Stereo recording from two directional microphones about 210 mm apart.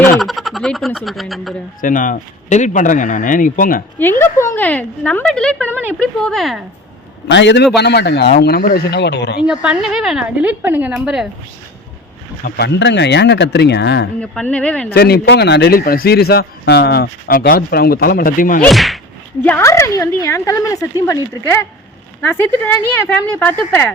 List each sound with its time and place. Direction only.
0.2 s speech: centre (ahead or behind)
1.8 s speech: 40° left (ahead or behind)
3.9 s a woman's voice: 10° left (ahead or behind)
7.3 s a man's voice: 55° left (ahead or behind)
9.5 s a woman's voice: 5° right (ahead or behind)
12.5 s a man's voice: 50° left (ahead or behind)
14.2 s a woman's voice: 5° left (ahead or behind)
14.9 s a man's voice: 50° left (ahead or behind)
18.6 s a woman's voice: centre (ahead or behind)
19.4 s a woman's voice: 10° left (ahead or behind)